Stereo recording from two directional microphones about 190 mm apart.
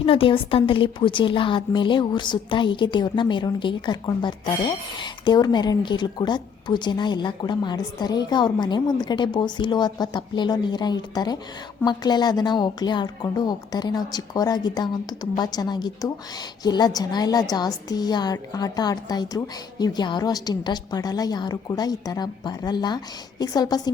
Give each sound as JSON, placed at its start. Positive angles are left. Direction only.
{"t": 0.0, "sound": "a woman's voice", "side_deg": 30}